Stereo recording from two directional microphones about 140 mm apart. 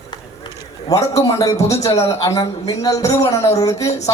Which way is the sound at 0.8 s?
25° left (ahead or behind).